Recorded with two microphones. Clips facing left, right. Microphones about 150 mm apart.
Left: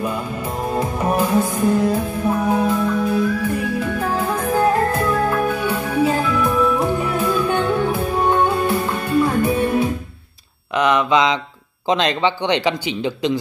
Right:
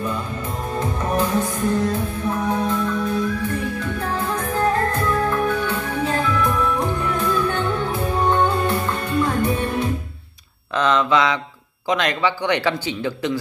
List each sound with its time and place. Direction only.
0.7 s music: 10° left (ahead or behind)
10.8 s mantra: 15° left (ahead or behind)
11.9 s speech: 25° left (ahead or behind)